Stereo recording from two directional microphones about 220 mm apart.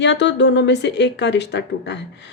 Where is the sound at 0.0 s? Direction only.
55° left (ahead or behind).